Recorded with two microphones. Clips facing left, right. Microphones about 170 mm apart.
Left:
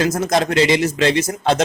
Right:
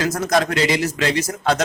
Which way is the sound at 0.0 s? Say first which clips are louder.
Left 2 dB; 25° left (ahead or behind).